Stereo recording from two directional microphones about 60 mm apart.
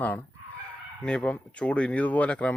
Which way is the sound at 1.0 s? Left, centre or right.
Centre.